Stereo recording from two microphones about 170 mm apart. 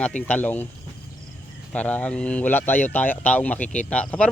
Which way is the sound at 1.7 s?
10° left (ahead or behind).